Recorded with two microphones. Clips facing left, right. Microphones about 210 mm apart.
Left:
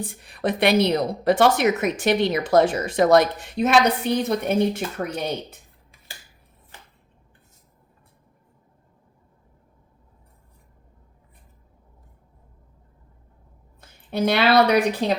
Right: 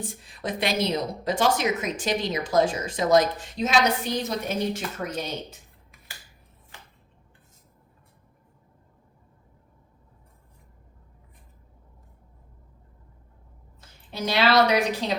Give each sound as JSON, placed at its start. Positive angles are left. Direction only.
{"t": 0.0, "sound": "a woman's voice", "side_deg": 60}
{"t": 13.8, "sound": "a woman's voice", "side_deg": 60}